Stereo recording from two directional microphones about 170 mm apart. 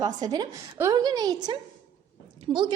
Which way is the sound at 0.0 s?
25° right (ahead or behind).